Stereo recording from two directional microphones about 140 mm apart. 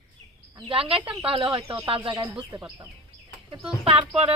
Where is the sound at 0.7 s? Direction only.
40° right (ahead or behind).